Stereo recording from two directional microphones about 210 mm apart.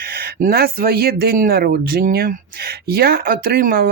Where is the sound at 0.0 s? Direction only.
45° right (ahead or behind).